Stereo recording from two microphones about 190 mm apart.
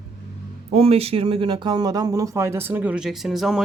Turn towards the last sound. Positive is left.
turn(degrees=0)  # may be behind; listen again after turning